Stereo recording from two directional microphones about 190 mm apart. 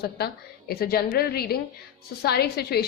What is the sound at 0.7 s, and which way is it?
A woman's voice, 55° left (ahead or behind).